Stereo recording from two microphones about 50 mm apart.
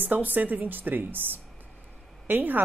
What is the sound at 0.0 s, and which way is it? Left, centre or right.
A woman's voice, right.